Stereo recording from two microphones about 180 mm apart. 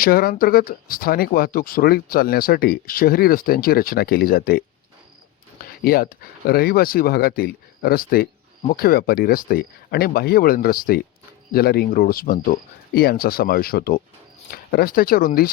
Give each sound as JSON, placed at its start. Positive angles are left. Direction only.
{"t": 0.0, "sound": "speech", "side_deg": 55}
{"t": 5.8, "sound": "speech", "side_deg": 55}